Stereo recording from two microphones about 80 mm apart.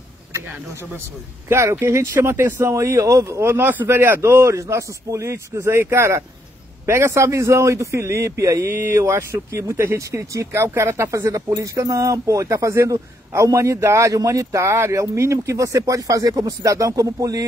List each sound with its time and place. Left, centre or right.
1.5 s a man's voice: right
2.7 s a man's voice: right
3.3 s a man's voice: right
8.6 s a man's voice: right